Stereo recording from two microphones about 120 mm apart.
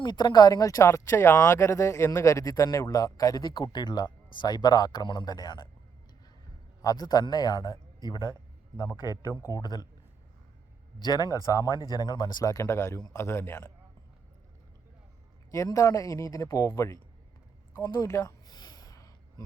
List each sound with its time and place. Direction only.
0.0 s speech: 40° left (ahead or behind)
6.8 s a man's voice: 35° left (ahead or behind)
11.0 s speech: 35° left (ahead or behind); by 13.7 s 15° left (ahead or behind)
15.5 s speech: 25° left (ahead or behind)
17.8 s a sound: 25° left (ahead or behind)